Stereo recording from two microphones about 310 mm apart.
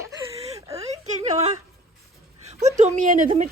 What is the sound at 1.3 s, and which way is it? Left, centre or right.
Speech, right.